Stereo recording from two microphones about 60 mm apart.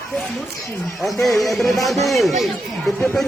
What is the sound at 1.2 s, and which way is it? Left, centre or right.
Speech, centre.